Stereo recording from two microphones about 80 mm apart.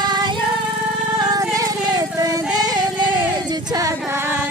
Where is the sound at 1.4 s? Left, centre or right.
Right.